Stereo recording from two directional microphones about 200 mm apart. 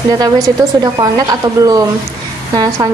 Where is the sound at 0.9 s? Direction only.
15° right (ahead or behind).